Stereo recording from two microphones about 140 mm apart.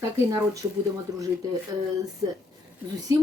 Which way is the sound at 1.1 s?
25° right (ahead or behind).